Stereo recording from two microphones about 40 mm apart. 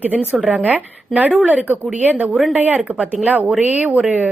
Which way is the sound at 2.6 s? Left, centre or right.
Right.